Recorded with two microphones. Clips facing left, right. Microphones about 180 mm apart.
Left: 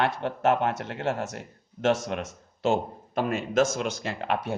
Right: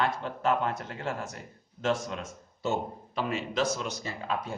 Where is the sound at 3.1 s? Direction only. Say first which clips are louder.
Left 6 dB; 50° left (ahead or behind).